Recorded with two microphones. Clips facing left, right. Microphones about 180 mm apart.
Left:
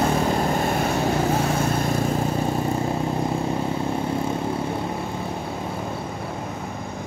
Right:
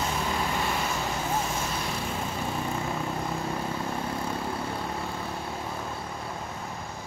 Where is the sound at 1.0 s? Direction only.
65° left (ahead or behind); by 3.6 s 30° left (ahead or behind).